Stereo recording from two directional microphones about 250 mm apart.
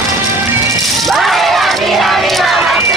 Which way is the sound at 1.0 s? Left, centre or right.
Centre.